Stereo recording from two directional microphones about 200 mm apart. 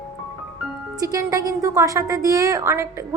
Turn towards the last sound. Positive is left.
turn(degrees=-15)  # may be behind; listen again after turning